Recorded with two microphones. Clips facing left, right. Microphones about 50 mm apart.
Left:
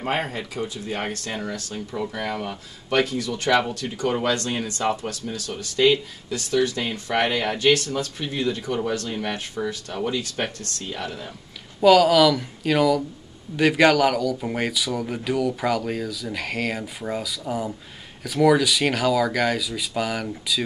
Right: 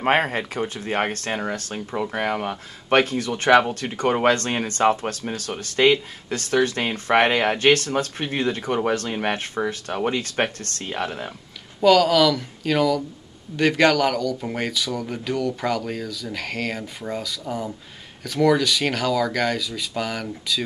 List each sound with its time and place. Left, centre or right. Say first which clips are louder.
0.0 s speech: right 6 dB; right
11.8 s speech: left 1 dB; centre